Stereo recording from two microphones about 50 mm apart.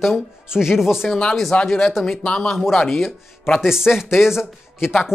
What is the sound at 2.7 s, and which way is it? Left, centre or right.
Speech, centre.